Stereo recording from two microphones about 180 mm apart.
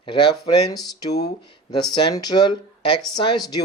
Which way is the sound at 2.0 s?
25° left (ahead or behind).